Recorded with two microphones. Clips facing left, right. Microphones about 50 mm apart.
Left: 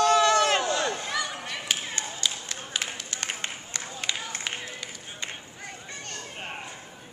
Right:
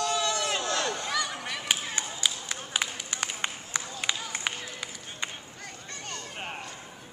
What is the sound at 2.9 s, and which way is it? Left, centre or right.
Run, centre.